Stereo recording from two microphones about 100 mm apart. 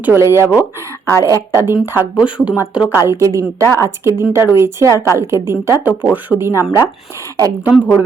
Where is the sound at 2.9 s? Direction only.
25° right (ahead or behind).